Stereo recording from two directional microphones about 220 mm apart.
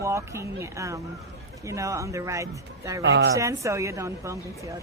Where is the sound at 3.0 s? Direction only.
50° right (ahead or behind).